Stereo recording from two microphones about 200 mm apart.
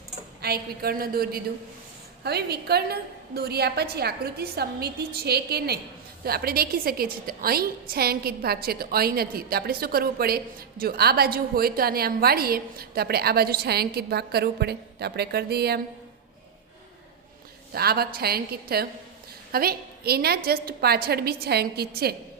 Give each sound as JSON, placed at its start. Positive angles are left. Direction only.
{"t": 0.4, "sound": "a woman's voice", "side_deg": -50}
{"t": 17.7, "sound": "a woman's voice", "side_deg": -50}